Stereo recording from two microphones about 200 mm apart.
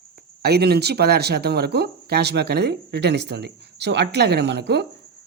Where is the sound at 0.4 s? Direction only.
55° right (ahead or behind).